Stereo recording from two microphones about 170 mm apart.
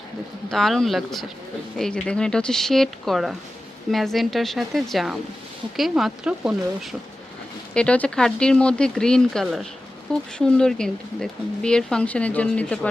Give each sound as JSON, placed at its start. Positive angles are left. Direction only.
{"t": 0.5, "sound": "speech", "side_deg": 0}
{"t": 7.7, "sound": "speech", "side_deg": 5}